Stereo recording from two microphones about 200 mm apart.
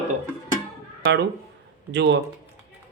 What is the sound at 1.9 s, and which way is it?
Speech, 60° right (ahead or behind).